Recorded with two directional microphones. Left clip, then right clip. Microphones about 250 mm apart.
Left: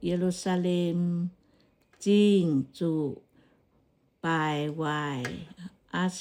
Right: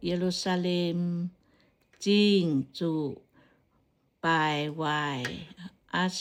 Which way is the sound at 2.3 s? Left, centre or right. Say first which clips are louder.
Left 1 dB; right.